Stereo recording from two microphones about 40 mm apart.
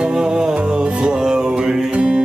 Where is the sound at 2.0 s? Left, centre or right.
Right.